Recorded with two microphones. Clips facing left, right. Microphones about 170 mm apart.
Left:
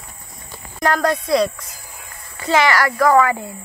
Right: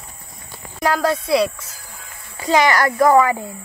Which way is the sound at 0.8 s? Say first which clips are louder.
Even; 5° right (ahead or behind).